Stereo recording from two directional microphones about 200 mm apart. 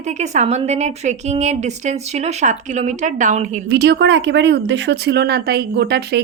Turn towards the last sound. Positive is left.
turn(degrees=-55)  # may be behind; listen again after turning